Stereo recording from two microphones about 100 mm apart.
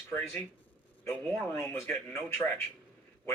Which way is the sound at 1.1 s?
20° left (ahead or behind).